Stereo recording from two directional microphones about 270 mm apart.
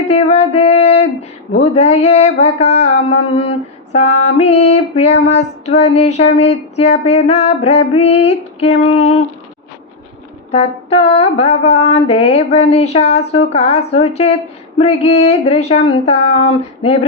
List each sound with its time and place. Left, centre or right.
0.1 s music: left
1.5 s mantra: left
10.5 s mantra: left